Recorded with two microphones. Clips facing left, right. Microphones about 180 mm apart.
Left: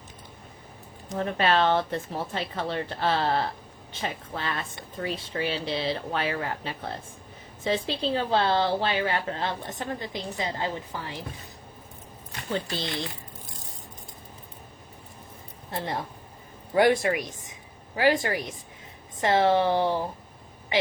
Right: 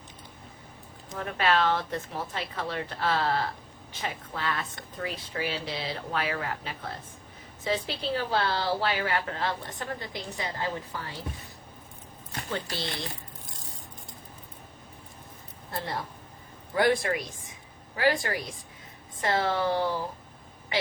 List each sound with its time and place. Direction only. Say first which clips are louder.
1.1 s a woman's voice: left 2 dB; 30° left (ahead or behind)
12.7 s a woman's voice: left 3 dB; 20° left (ahead or behind)
16.7 s a man's voice: left 4 dB; 15° left (ahead or behind)